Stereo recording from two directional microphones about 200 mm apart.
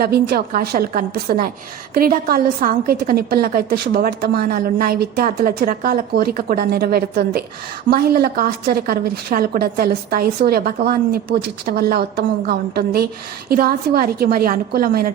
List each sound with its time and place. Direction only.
0.0 s a woman's voice: 50° right (ahead or behind)